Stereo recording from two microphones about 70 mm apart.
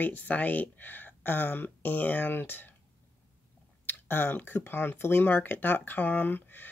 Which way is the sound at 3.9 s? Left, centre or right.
Left.